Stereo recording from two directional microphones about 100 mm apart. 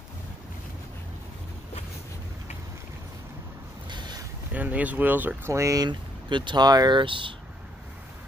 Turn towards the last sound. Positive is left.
turn(degrees=-55)  # may be behind; listen again after turning